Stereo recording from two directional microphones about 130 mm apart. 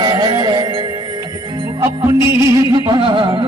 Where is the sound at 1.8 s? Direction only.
20° right (ahead or behind).